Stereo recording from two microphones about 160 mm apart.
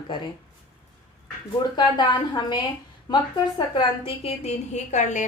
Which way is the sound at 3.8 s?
35° left (ahead or behind).